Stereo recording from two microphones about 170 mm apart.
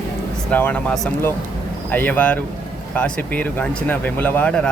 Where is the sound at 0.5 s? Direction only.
10° left (ahead or behind).